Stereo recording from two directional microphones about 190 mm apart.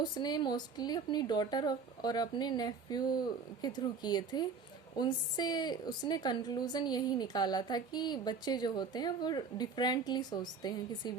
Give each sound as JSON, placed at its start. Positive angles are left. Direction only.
{"t": 0.0, "sound": "a woman's voice", "side_deg": 20}